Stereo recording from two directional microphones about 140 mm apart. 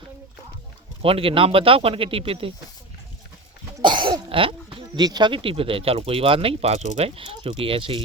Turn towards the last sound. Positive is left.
turn(degrees=-40)  # may be behind; listen again after turning